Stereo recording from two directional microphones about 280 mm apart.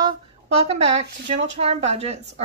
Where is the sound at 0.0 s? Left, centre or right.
Right.